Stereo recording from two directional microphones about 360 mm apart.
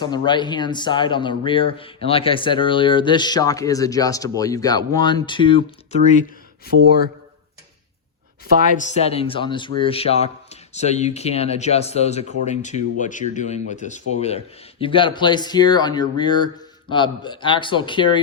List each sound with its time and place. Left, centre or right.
0.0 s speech: centre
8.7 s speech: centre